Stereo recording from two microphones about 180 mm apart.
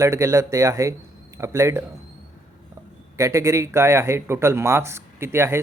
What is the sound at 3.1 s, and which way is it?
Speech, 15° right (ahead or behind).